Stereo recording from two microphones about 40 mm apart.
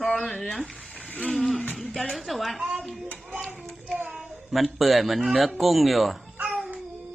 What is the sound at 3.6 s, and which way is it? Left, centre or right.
Child singing, centre.